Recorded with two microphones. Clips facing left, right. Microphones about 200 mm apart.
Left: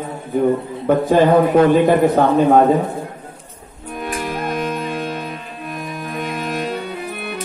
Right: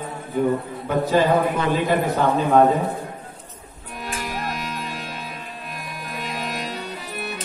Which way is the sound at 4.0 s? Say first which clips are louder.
Left 6 dB; 50° left (ahead or behind).